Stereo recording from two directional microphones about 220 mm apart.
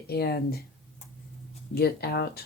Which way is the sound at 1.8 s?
45° left (ahead or behind).